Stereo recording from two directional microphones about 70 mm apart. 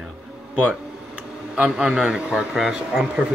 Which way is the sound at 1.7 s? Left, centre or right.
Centre.